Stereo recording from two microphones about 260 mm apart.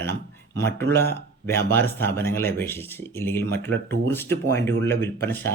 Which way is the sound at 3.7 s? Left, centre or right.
Right.